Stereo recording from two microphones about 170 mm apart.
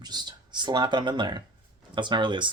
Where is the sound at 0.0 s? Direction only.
25° right (ahead or behind).